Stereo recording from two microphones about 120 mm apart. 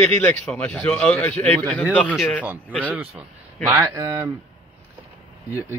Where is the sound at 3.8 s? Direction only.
25° right (ahead or behind).